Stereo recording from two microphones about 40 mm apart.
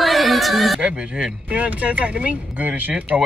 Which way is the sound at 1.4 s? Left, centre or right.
Right.